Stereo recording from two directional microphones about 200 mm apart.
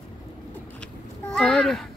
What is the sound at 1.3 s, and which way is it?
Speech, 5° left (ahead or behind).